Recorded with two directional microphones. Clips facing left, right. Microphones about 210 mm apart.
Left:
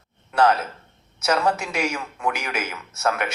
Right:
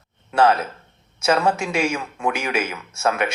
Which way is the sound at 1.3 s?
25° right (ahead or behind).